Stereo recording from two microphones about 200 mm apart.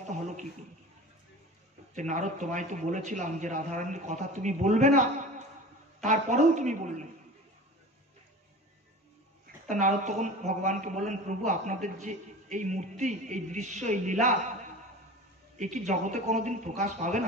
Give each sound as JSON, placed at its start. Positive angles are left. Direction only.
{"t": 2.0, "sound": "a woman's voice", "side_deg": -35}
{"t": 6.0, "sound": "a woman's voice", "side_deg": -35}
{"t": 9.7, "sound": "a woman's voice", "side_deg": -40}